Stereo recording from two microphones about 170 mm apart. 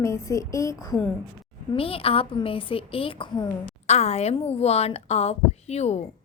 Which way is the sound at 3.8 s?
40° left (ahead or behind).